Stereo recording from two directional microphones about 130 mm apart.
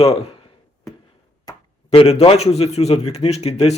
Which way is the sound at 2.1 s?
55° left (ahead or behind).